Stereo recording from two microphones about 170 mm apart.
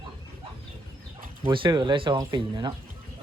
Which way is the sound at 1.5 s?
30° right (ahead or behind).